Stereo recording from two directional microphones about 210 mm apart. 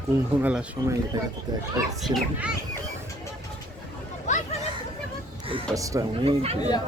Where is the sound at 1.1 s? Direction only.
20° right (ahead or behind).